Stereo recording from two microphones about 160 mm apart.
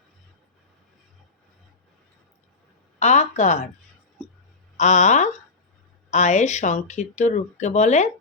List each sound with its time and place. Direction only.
3.0 s a woman's voice: 45° left (ahead or behind)
4.8 s speech: 45° left (ahead or behind)